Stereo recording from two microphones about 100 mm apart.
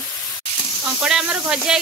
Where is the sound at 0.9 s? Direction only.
5° right (ahead or behind).